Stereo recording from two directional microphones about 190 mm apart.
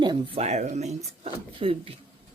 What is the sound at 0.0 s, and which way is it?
Speech, 25° right (ahead or behind).